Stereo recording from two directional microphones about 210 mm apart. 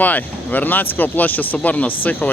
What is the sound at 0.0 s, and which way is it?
Speech, 5° left (ahead or behind).